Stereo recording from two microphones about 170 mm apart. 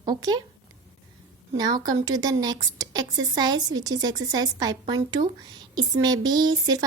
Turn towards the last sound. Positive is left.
turn(degrees=-25)  # may be behind; listen again after turning